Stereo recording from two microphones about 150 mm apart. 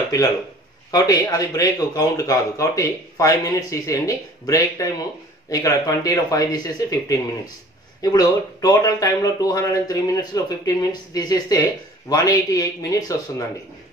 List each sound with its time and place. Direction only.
0.9 s speech: 25° left (ahead or behind)